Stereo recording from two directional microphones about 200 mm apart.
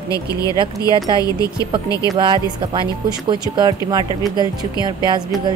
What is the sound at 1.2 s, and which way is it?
Speech, 20° left (ahead or behind).